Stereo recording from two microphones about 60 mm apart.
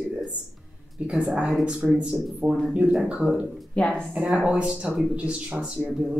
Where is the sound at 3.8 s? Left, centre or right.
Centre.